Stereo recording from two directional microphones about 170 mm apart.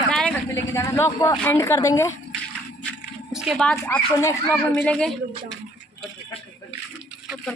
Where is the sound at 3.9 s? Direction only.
15° left (ahead or behind).